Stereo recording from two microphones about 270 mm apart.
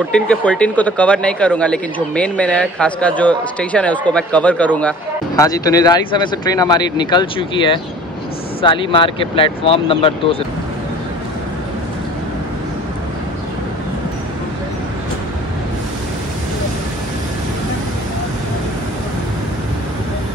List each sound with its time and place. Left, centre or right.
0.1 s speech: centre